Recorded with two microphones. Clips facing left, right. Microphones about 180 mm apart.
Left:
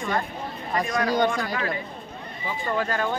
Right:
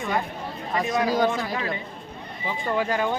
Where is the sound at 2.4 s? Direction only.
15° right (ahead or behind).